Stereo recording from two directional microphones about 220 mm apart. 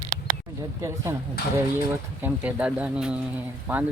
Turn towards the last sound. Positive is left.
turn(degrees=-5)  # may be behind; listen again after turning